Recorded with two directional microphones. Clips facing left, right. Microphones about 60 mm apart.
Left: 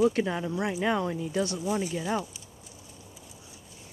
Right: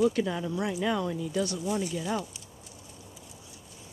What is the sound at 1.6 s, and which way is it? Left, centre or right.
Speech, centre.